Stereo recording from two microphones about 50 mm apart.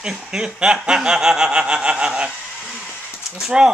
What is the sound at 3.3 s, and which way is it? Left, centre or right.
Speech, centre.